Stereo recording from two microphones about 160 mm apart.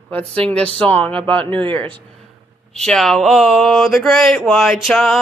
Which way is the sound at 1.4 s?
35° right (ahead or behind).